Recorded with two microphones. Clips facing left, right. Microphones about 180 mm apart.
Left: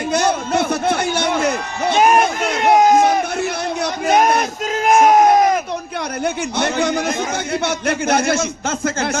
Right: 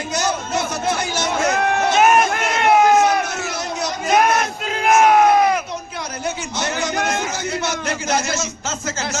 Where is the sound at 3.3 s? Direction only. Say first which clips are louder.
Left 4 dB; 55° left (ahead or behind).